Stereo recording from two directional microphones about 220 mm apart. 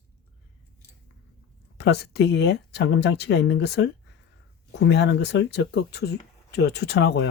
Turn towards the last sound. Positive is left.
turn(degrees=50)  # may be behind; listen again after turning